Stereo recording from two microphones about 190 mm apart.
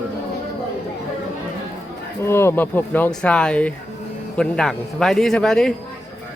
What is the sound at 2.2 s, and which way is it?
A man's voice, 15° left (ahead or behind).